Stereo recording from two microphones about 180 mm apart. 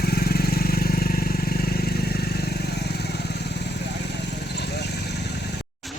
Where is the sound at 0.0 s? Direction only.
60° left (ahead or behind).